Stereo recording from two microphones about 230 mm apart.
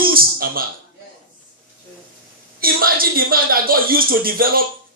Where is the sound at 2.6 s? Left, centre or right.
Right.